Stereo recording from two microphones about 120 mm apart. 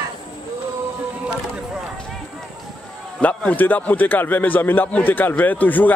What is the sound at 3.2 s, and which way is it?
A man's voice, 15° left (ahead or behind).